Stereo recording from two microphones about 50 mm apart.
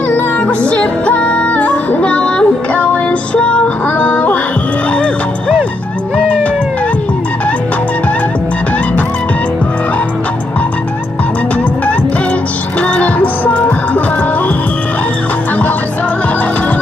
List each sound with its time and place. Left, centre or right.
0.1 s music: left
12.8 s music: left